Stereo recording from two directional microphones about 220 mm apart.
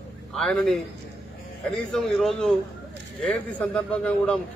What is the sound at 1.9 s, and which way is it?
A man's voice, centre (ahead or behind).